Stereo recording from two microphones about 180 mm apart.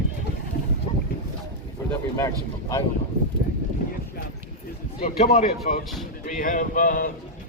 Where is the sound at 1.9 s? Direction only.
15° left (ahead or behind).